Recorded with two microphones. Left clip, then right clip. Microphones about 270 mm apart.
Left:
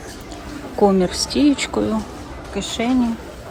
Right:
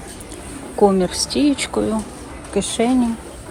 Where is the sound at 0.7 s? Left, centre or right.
Centre.